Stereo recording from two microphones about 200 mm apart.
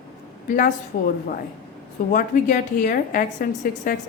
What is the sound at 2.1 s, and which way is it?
A woman's voice, 45° left (ahead or behind).